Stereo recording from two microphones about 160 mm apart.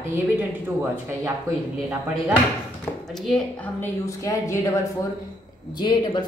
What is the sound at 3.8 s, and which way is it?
Speech, 20° left (ahead or behind).